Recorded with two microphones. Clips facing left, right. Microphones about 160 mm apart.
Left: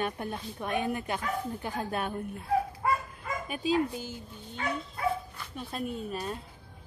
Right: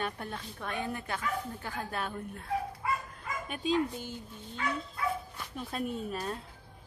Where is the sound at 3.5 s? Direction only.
5° left (ahead or behind).